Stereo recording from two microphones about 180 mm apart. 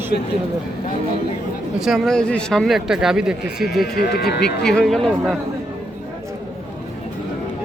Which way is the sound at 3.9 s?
60° left (ahead or behind).